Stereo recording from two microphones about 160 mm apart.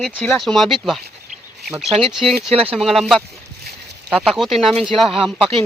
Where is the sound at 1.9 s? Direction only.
35° right (ahead or behind).